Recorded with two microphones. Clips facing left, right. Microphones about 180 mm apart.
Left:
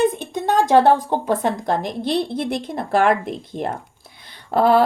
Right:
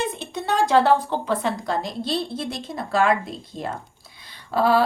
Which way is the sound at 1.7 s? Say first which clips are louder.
Left 4 dB; 20° left (ahead or behind).